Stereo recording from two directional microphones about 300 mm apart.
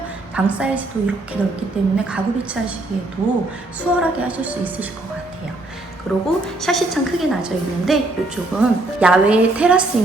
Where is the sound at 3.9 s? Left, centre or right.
Centre.